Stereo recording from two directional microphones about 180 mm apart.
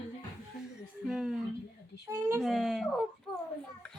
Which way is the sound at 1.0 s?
Centre (ahead or behind).